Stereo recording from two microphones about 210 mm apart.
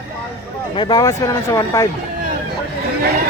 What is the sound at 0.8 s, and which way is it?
Speech, 20° left (ahead or behind).